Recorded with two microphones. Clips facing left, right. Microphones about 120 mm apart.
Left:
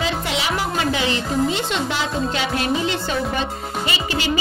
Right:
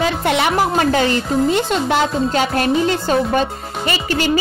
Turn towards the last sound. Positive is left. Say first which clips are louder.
# right 4 dB
turn(degrees=-50)  # may be behind; listen again after turning